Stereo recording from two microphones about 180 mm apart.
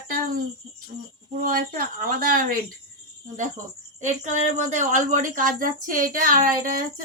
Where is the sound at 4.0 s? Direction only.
40° right (ahead or behind).